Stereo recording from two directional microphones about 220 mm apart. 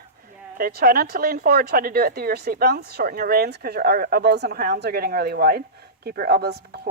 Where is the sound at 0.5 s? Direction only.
45° right (ahead or behind).